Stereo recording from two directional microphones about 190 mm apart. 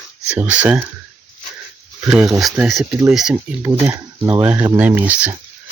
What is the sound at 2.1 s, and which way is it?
Speech, 5° right (ahead or behind).